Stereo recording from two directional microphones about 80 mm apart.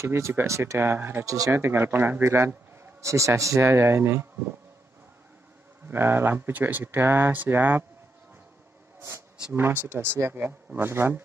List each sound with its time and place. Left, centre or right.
0.0 s a man's voice: right
1.2 s speech: right
1.5 s a man's voice: right
5.9 s speech: right
9.5 s speech: right